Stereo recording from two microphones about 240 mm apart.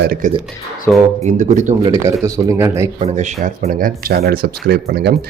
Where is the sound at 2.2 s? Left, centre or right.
Centre.